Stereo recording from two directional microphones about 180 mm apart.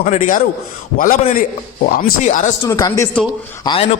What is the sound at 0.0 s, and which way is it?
Speech, 45° left (ahead or behind).